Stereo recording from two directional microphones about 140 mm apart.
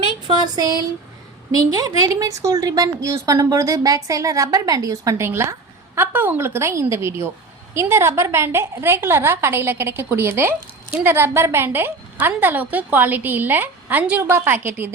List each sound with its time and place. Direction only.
0.3 s speech: 30° right (ahead or behind)
2.0 s a woman's voice: 25° right (ahead or behind)